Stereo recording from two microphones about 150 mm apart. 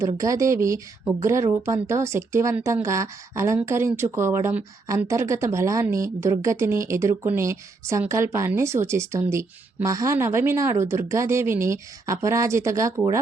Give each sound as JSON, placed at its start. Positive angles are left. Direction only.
{"t": 0.0, "sound": "speech", "side_deg": -20}